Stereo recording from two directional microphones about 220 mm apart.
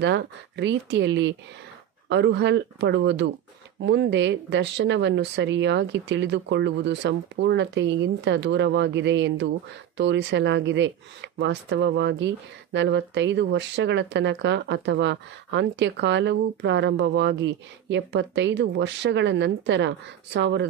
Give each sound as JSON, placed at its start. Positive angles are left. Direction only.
{"t": 0.0, "sound": "speech", "side_deg": -55}